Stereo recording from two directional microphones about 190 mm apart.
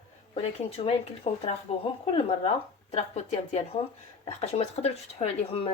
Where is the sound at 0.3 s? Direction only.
30° left (ahead or behind).